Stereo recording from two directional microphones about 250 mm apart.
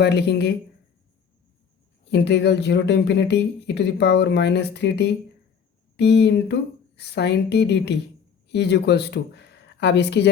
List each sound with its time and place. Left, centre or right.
0.0 s speech: left
2.0 s speech: left